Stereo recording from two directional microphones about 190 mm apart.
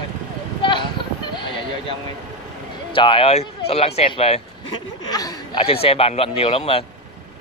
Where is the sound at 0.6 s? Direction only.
25° left (ahead or behind).